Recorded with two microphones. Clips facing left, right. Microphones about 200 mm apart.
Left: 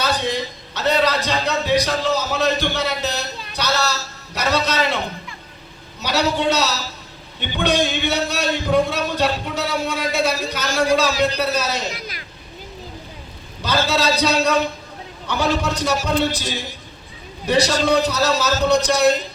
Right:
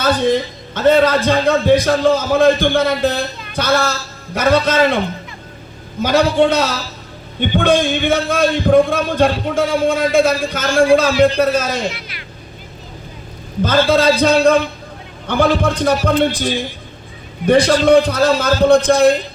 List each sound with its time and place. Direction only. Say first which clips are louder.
0.0 s a man's voice: right 7 dB; 50° right (ahead or behind)
6.0 s a man's voice: right 8 dB; 50° right (ahead or behind)
11.9 s speech: right 4 dB; 40° left (ahead or behind)
13.6 s a man's voice: right 7 dB; 50° right (ahead or behind)